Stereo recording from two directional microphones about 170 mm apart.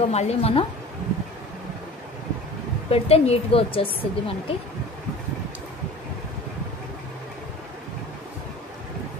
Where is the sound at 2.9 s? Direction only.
35° left (ahead or behind).